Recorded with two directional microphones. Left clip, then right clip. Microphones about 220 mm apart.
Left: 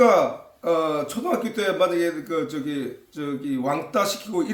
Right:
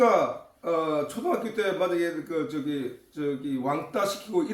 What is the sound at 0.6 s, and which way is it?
A man's voice, 45° left (ahead or behind).